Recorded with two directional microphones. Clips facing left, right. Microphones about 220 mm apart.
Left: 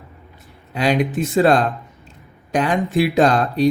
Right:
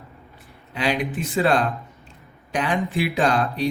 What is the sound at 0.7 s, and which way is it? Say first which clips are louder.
Speech: left 5 dB; 40° left (ahead or behind).